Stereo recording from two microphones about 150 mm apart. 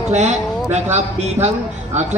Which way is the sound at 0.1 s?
50° right (ahead or behind).